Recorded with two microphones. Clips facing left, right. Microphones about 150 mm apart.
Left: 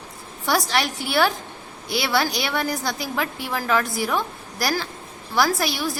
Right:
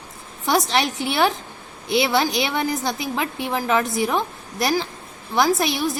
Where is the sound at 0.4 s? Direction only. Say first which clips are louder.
Right 2 dB; 20° right (ahead or behind).